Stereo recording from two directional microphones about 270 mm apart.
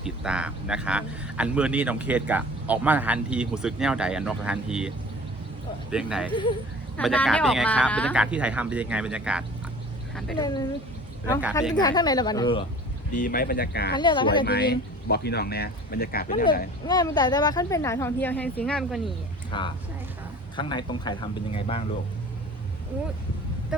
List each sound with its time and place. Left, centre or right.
0.0 s speech: centre
5.9 s speech: centre
10.3 s speech: centre
11.7 s speech: centre
13.1 s speech: left
13.9 s speech: centre
14.4 s speech: left
16.8 s speech: centre
19.5 s speech: centre